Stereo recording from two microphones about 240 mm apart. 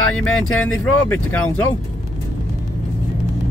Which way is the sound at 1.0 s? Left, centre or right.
Centre.